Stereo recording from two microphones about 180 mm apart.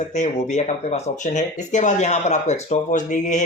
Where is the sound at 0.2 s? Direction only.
40° left (ahead or behind).